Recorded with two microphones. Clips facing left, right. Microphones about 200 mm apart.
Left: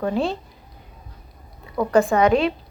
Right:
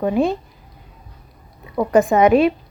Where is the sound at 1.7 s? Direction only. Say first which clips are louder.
Right 3 dB; 20° right (ahead or behind).